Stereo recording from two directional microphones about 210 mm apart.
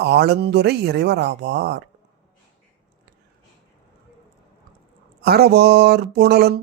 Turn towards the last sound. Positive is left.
turn(degrees=-50)  # may be behind; listen again after turning